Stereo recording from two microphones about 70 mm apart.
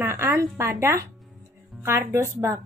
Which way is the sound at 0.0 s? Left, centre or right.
Right.